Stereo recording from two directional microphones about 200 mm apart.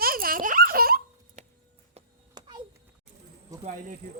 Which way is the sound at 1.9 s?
20° right (ahead or behind).